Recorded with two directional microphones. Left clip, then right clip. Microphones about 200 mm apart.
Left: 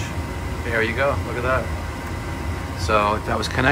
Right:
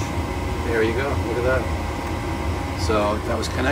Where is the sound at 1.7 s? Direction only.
50° right (ahead or behind).